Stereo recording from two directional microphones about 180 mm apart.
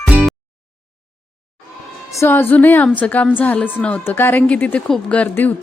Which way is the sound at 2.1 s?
10° left (ahead or behind).